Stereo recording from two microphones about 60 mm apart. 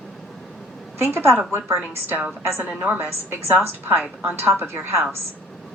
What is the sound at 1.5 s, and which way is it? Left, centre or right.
Speech, right.